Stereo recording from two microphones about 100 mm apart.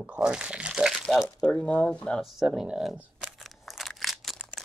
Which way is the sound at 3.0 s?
10° right (ahead or behind).